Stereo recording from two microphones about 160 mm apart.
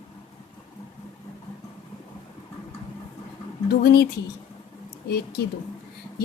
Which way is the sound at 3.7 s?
90° left.